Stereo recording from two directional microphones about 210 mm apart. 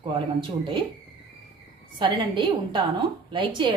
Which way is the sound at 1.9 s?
20° right (ahead or behind).